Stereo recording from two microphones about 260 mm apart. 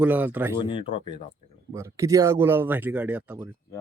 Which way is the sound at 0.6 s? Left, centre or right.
Centre.